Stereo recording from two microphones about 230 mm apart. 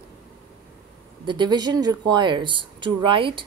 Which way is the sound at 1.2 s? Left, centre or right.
Centre.